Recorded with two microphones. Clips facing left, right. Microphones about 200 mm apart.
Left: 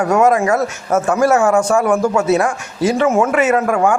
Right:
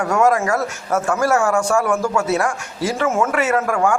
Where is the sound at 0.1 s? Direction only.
20° left (ahead or behind).